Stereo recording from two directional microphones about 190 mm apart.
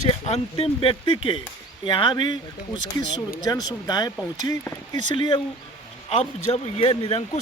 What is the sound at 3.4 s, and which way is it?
Speech, 20° left (ahead or behind).